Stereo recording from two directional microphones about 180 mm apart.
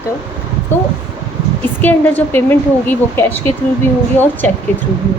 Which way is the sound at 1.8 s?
10° left (ahead or behind).